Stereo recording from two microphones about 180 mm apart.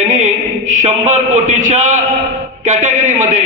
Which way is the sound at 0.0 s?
45° right (ahead or behind).